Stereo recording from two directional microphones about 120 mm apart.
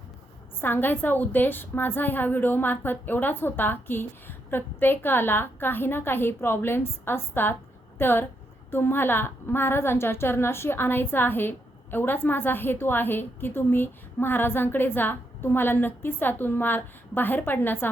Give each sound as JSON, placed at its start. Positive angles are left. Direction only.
{"t": 0.6, "sound": "a woman's voice", "side_deg": 15}